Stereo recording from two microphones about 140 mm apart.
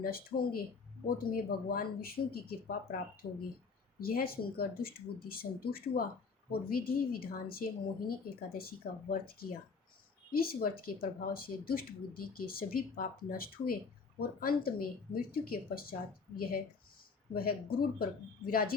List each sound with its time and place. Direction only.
0.0 s a woman's voice: 90° left
4.0 s a woman's voice: 90° left